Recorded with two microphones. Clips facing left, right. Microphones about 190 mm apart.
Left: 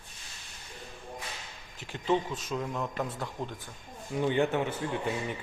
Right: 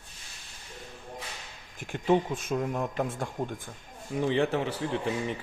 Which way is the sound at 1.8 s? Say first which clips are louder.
Right 4 dB; 50° right (ahead or behind).